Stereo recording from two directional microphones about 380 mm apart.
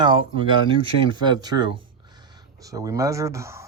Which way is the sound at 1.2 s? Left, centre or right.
Centre.